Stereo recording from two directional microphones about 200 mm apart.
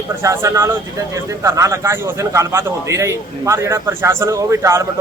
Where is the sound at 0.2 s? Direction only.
15° right (ahead or behind).